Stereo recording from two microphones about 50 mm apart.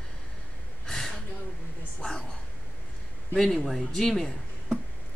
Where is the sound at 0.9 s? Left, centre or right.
Centre.